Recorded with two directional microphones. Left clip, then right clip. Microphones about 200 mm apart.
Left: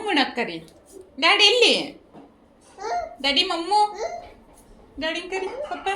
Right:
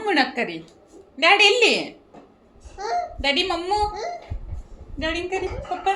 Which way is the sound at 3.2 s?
25° right (ahead or behind).